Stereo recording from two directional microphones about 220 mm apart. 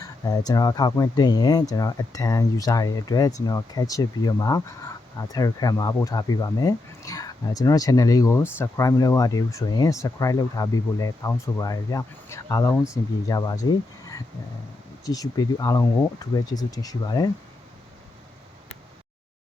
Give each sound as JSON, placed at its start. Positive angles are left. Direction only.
{"t": 0.0, "sound": "speech", "side_deg": 15}
{"t": 15.0, "sound": "speech", "side_deg": 15}